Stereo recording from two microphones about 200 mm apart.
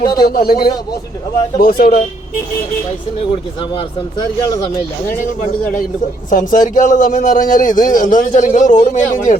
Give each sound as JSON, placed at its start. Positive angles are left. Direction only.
{"t": 0.0, "sound": "speech", "side_deg": 20}
{"t": 0.3, "sound": "a man's voice", "side_deg": 50}
{"t": 3.8, "sound": "speech", "side_deg": 20}
{"t": 6.3, "sound": "a man's voice", "side_deg": 40}